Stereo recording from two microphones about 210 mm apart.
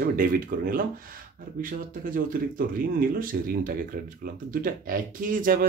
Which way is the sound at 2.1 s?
40° right (ahead or behind).